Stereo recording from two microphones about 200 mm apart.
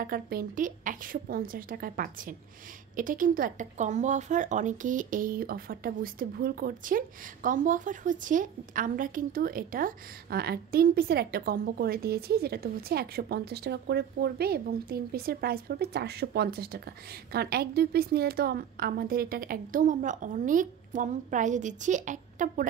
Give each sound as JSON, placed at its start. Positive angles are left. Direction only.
{"t": 0.0, "sound": "a woman's voice", "side_deg": -45}